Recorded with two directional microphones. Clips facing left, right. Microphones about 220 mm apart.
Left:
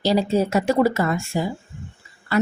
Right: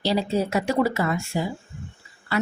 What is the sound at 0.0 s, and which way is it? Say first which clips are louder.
A woman's voice: left 4 dB; 45° left (ahead or behind).